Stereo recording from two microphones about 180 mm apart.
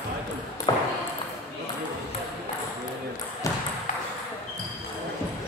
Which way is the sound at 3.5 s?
20° left (ahead or behind).